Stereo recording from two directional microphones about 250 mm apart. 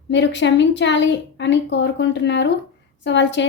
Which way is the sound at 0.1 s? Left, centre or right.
Left.